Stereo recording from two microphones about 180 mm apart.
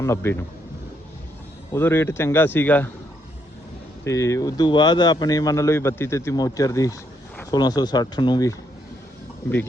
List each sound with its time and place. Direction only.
0.0 s a man's voice: 15° left (ahead or behind)
1.7 s a man's voice: 15° left (ahead or behind)
4.0 s speech: 15° left (ahead or behind)